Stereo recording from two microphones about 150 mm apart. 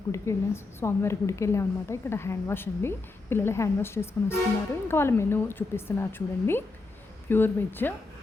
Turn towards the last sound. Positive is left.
turn(degrees=15)  # may be behind; listen again after turning